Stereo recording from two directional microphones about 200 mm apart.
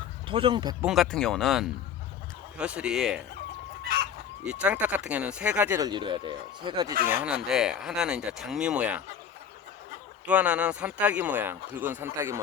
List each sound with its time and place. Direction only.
0.3 s speech: 25° right (ahead or behind)
0.8 s speech: centre (ahead or behind)
4.4 s speech: 5° right (ahead or behind); by 6.9 s 20° right (ahead or behind)
7.1 s speech: 5° right (ahead or behind)
10.2 s speech: 5° right (ahead or behind)